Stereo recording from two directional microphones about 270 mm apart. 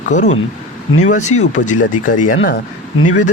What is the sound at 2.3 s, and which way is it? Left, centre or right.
Speech, left.